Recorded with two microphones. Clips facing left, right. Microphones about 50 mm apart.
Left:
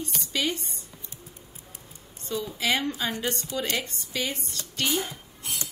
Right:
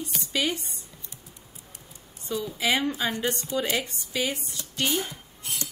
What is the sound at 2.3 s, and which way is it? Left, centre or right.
Speech, centre.